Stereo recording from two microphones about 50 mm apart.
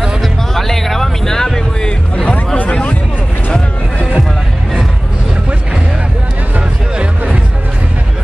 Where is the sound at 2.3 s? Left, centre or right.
Left.